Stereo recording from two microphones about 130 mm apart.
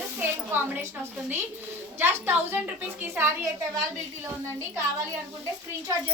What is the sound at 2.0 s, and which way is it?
A woman's voice, 20° right (ahead or behind).